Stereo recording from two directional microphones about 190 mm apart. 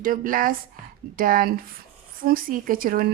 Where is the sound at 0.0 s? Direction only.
45° right (ahead or behind).